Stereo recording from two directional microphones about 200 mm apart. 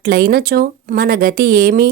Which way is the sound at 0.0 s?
50° right (ahead or behind).